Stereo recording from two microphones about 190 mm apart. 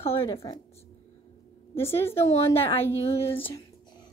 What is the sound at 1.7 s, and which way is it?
A woman's voice, 15° left (ahead or behind).